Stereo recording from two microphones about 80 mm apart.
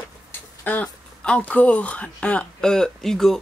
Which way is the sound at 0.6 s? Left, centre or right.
Centre.